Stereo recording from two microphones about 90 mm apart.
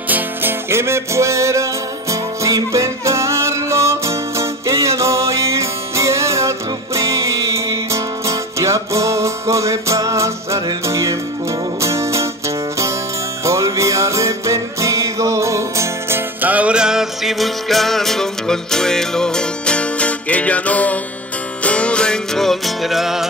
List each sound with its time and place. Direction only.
0.1 s music: 25° right (ahead or behind)
16.3 s music: 15° right (ahead or behind)